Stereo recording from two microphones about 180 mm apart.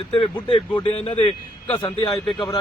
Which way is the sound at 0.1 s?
30° left (ahead or behind).